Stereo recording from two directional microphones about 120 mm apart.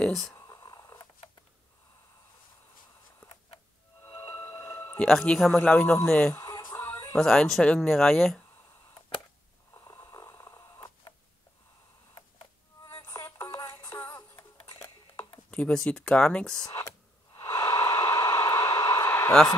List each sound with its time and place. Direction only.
0.0 s a sound: centre (ahead or behind)
0.3 s a sound: 25° left (ahead or behind)
4.0 s music: 30° left (ahead or behind)
5.0 s speech: 5° left (ahead or behind)
6.3 s music: 30° left (ahead or behind)
7.2 s speech: centre (ahead or behind)
9.8 s snoring: 30° left (ahead or behind)
12.8 s music: 30° left (ahead or behind)
15.5 s speech: 10° left (ahead or behind)
16.6 s a sound: 30° left (ahead or behind)